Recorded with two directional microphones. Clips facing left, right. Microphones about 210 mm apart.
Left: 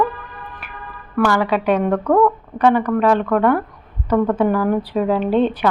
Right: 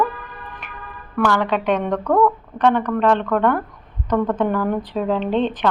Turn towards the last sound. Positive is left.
turn(degrees=10)  # may be behind; listen again after turning